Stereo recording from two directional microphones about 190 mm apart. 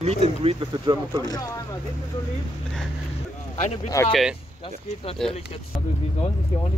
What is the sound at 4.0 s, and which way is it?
Speech, 15° left (ahead or behind).